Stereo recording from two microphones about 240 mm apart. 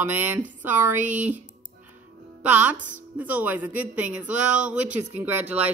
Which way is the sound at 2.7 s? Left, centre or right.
Right.